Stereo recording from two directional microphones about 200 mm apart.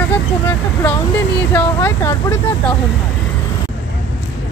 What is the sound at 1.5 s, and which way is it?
Speech, 10° left (ahead or behind).